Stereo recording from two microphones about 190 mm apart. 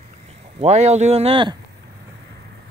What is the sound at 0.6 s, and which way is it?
Speech, 35° right (ahead or behind).